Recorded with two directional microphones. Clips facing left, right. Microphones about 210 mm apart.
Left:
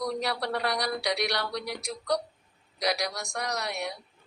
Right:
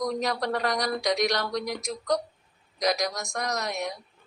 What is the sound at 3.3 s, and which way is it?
Speech, 40° right (ahead or behind).